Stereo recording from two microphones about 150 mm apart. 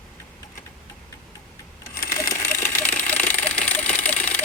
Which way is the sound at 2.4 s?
15° left (ahead or behind).